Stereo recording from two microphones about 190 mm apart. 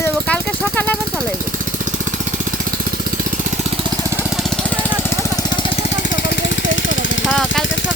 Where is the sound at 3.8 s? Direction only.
15° right (ahead or behind).